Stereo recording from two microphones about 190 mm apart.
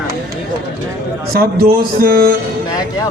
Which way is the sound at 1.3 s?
50° right (ahead or behind).